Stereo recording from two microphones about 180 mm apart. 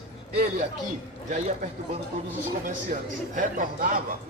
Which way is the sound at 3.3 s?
50° right (ahead or behind).